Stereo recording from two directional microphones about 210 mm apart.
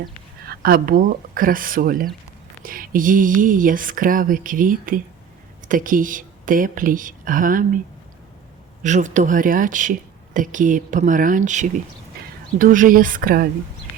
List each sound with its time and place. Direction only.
0.4 s speech: 45° right (ahead or behind)
8.8 s speech: 35° right (ahead or behind)
12.1 s a sound: 45° right (ahead or behind)
12.5 s speech: 40° right (ahead or behind)